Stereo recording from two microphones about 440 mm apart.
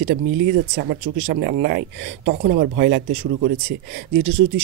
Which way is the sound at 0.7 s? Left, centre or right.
Right.